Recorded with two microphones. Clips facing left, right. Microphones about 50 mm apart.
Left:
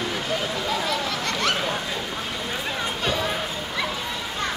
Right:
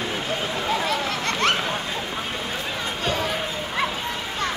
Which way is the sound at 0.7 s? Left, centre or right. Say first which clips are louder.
Right 3 dB; right.